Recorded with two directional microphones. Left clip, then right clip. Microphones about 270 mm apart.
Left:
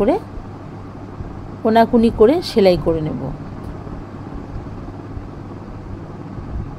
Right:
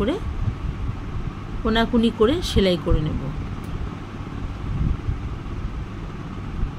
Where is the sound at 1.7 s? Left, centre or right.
Centre.